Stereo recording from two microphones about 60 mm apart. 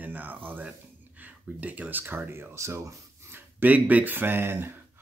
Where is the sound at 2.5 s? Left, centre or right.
Right.